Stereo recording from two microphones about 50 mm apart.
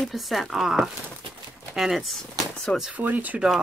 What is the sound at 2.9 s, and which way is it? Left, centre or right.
Speech, right.